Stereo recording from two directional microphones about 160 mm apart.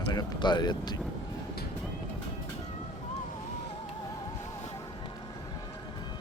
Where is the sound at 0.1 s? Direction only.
25° left (ahead or behind).